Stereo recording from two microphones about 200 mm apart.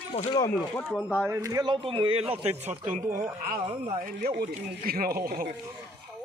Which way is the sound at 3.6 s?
30° right (ahead or behind).